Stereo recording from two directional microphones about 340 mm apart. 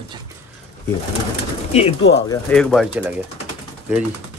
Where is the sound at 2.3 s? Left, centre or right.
Centre.